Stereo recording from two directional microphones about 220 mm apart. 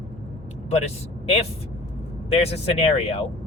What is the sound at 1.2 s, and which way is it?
Speech, 25° left (ahead or behind).